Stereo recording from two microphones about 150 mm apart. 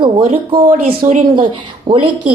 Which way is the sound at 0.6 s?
65° right (ahead or behind).